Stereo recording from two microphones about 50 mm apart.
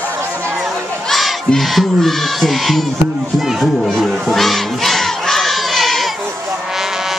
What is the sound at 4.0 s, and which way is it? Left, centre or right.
Crowd, centre.